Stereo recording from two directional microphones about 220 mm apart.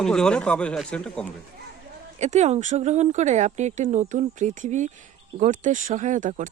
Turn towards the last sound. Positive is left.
turn(degrees=-35)  # may be behind; listen again after turning